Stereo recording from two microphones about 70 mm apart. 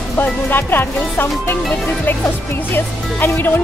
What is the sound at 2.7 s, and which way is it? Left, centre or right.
Speech, left.